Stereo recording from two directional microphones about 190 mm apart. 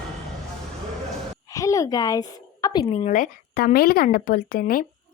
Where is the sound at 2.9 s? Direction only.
35° left (ahead or behind).